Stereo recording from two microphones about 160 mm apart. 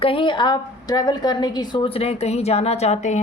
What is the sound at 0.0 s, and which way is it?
A woman's voice, 35° left (ahead or behind).